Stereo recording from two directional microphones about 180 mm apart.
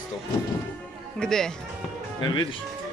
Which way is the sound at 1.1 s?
5° left (ahead or behind).